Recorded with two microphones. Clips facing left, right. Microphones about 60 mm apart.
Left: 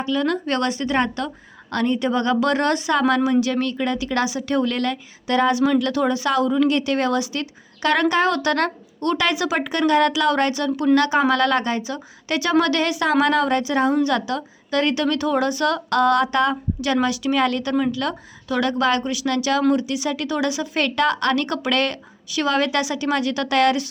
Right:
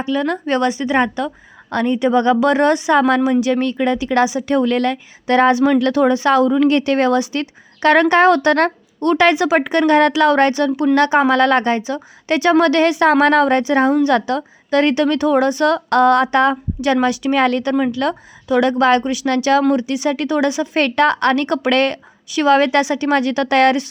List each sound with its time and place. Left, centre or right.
0.0 s a woman's voice: right